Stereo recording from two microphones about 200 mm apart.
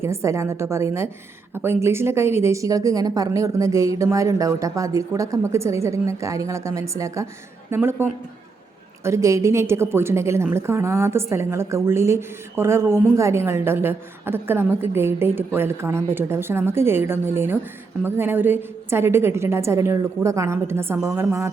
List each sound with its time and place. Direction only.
0.0 s a woman's voice: 15° right (ahead or behind)